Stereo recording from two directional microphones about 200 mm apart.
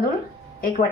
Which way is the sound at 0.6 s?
45° left (ahead or behind).